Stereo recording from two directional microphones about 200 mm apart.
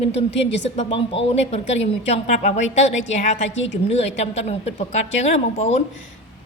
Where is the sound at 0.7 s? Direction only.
30° left (ahead or behind).